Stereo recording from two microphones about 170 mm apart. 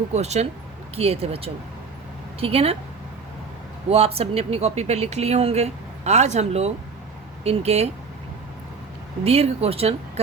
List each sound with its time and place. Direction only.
0.1 s speech: 40° right (ahead or behind)
3.8 s speech: 35° right (ahead or behind)
9.2 s speech: 35° right (ahead or behind)